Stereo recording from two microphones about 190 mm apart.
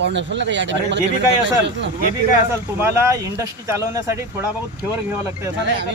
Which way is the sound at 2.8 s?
15° right (ahead or behind).